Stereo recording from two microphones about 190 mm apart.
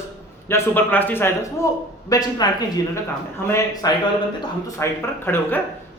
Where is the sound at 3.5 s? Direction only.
20° left (ahead or behind).